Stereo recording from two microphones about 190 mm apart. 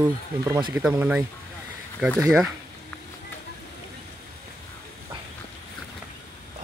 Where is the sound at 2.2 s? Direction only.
5° right (ahead or behind).